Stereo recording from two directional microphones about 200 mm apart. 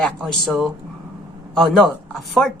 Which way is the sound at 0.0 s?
5° left (ahead or behind).